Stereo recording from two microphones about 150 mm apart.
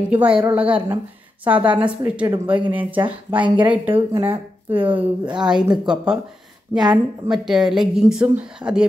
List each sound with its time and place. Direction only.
0.1 s speech: 10° right (ahead or behind)
5.0 s speech: 30° right (ahead or behind)
5.5 s a woman's voice: 5° right (ahead or behind)
6.7 s a woman's voice: 20° right (ahead or behind)
7.2 s a woman's voice: 5° right (ahead or behind)